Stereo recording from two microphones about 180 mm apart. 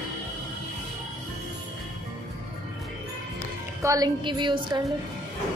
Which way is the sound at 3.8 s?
20° right (ahead or behind).